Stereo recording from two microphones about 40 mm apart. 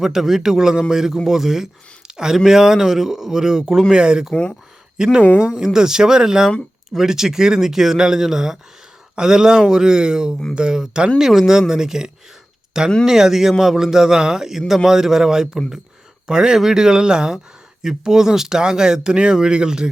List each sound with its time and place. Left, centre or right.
0.0 s speech: centre
3.9 s speech: right
11.2 s speech: centre